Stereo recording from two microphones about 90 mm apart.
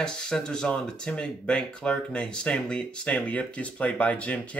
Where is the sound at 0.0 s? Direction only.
10° left (ahead or behind).